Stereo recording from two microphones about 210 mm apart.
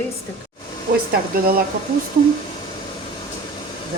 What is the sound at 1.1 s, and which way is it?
Speech, 45° right (ahead or behind).